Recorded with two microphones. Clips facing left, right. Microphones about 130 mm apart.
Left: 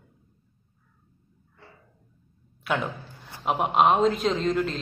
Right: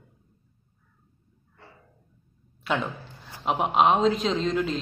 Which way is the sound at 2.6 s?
Centre (ahead or behind).